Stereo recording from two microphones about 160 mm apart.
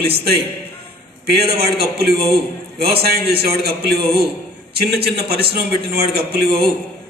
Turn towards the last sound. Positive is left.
turn(degrees=-80)